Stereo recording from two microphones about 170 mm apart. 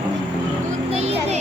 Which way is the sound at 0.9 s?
40° right (ahead or behind).